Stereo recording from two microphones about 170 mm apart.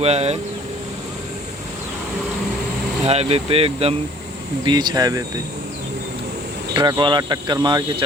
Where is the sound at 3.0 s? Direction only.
35° right (ahead or behind).